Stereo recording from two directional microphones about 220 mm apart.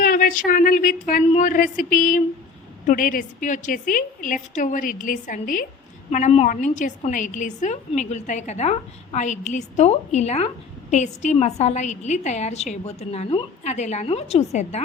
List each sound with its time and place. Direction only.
0.0 s a woman's voice: 40° left (ahead or behind)